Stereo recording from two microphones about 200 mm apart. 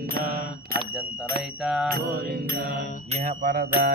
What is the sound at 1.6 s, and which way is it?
Mantra, centre (ahead or behind).